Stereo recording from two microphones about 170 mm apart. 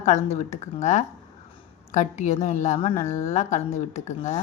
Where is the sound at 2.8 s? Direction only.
35° left (ahead or behind).